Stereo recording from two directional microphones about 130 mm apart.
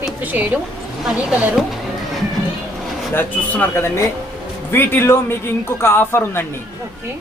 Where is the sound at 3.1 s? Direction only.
15° left (ahead or behind).